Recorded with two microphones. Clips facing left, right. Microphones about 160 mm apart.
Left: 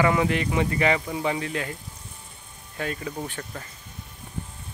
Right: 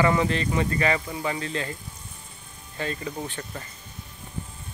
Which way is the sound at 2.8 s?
5° left (ahead or behind).